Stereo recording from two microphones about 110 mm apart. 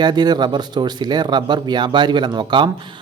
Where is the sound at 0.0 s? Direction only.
40° right (ahead or behind).